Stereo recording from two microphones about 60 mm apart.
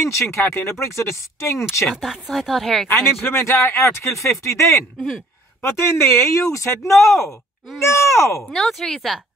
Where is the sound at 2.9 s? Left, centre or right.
Left.